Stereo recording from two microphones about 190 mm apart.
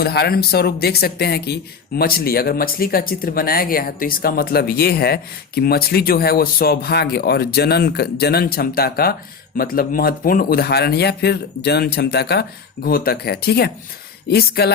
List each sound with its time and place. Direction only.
0.0 s speech: 55° left (ahead or behind)